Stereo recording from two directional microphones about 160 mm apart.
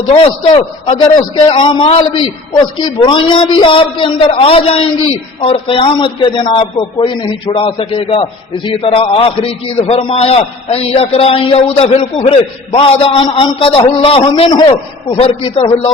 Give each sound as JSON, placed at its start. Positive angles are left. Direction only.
{"t": 0.1, "sound": "a man's voice", "side_deg": 30}